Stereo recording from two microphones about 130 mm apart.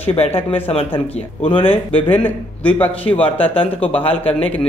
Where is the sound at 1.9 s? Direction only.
10° left (ahead or behind).